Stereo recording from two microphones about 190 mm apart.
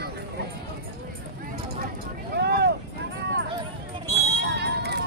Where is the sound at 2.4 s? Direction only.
60° right (ahead or behind).